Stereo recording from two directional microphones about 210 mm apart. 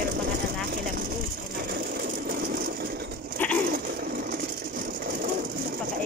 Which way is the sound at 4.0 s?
45° right (ahead or behind).